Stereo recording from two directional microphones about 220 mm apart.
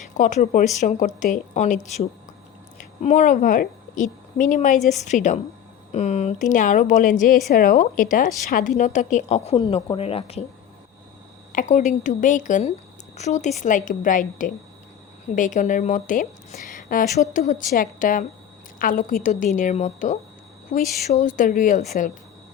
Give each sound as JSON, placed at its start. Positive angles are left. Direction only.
{"t": 0.1, "sound": "a woman's voice", "side_deg": 35}
{"t": 4.8, "sound": "a woman's voice", "side_deg": 0}
{"t": 5.9, "sound": "a woman's voice", "side_deg": 30}
{"t": 11.5, "sound": "a woman's voice", "side_deg": 35}